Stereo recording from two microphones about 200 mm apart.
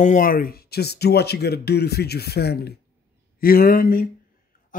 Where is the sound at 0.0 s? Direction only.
40° left (ahead or behind).